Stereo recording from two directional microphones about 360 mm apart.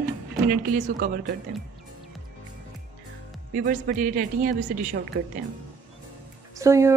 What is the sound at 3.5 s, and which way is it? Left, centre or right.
A woman's voice, right.